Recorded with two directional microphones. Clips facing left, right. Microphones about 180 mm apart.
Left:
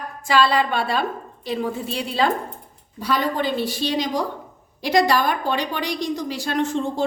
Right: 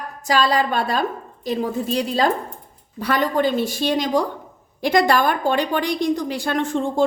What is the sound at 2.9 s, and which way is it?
A woman's voice, 60° right (ahead or behind).